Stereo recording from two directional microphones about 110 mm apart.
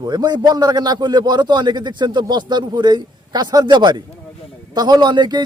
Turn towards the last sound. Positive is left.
turn(degrees=-40)  # may be behind; listen again after turning